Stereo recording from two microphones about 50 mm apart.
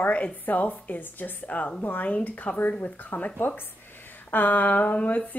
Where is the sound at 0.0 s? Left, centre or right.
Left.